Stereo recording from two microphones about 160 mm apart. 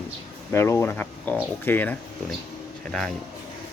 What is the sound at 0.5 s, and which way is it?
Speech, 15° left (ahead or behind).